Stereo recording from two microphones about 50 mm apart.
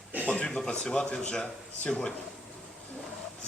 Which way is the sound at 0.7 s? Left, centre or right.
Centre.